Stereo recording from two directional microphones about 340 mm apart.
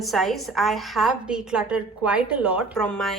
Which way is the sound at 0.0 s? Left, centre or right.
Centre.